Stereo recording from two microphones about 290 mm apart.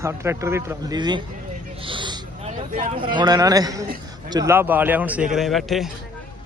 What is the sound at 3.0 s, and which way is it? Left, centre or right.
A man's voice, centre.